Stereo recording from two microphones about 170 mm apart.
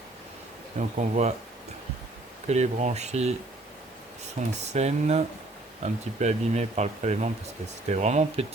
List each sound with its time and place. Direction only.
0.8 s speech: 45° right (ahead or behind)
2.5 s speech: 40° right (ahead or behind)
4.6 s speech: 40° right (ahead or behind)